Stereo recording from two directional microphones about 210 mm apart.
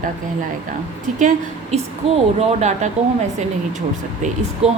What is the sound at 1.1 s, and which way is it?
A woman's voice, 35° right (ahead or behind).